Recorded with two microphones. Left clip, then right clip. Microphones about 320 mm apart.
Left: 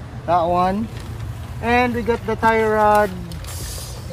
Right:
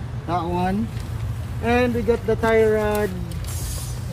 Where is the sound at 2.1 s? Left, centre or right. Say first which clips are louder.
Left 2 dB; centre.